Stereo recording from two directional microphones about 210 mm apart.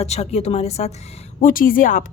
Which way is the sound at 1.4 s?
40° left (ahead or behind).